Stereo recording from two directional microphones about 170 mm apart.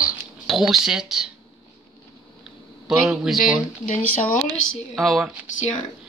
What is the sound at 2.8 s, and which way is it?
Speech, centre (ahead or behind).